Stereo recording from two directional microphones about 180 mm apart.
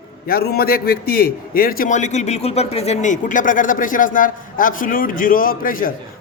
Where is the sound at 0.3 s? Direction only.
55° left (ahead or behind).